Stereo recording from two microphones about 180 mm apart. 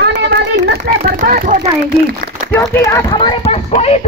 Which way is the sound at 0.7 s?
55° right (ahead or behind).